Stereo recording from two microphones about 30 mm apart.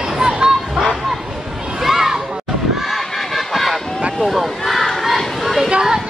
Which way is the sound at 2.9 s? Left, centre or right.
Centre.